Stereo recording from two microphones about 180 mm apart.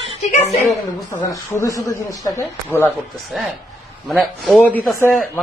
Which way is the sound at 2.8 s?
Centre (ahead or behind).